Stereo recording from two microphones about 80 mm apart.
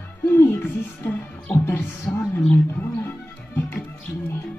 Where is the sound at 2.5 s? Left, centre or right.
Left.